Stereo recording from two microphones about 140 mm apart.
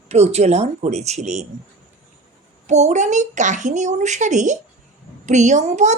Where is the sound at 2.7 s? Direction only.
55° right (ahead or behind).